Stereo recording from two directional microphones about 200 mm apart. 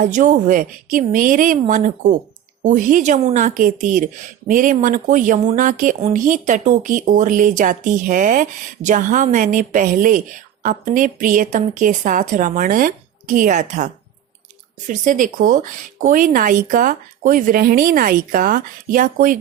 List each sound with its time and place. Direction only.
0.0 s a woman's voice: 40° right (ahead or behind)